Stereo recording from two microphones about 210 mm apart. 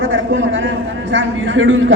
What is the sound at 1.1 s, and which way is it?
Speech, 65° right (ahead or behind).